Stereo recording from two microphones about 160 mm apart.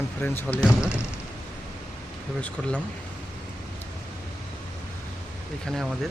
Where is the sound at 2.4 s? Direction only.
10° left (ahead or behind).